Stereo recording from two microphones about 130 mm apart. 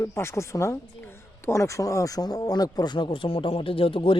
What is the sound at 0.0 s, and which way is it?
Speech, 20° left (ahead or behind).